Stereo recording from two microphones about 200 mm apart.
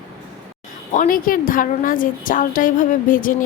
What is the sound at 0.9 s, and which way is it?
A woman's voice, 40° left (ahead or behind).